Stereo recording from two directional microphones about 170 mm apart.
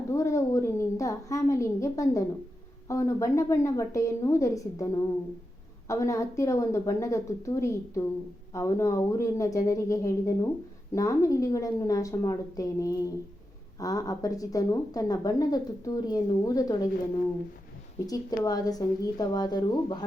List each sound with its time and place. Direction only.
0.1 s a woman's voice: 15° left (ahead or behind)
18.0 s speech: 20° left (ahead or behind)